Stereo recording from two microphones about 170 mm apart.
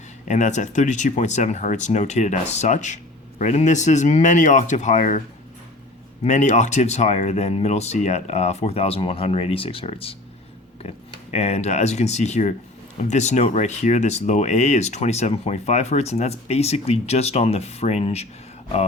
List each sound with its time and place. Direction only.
0.3 s speech: 45° left (ahead or behind)
6.2 s speech: 45° left (ahead or behind)